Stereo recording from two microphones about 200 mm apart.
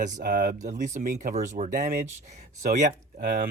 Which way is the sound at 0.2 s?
45° right (ahead or behind).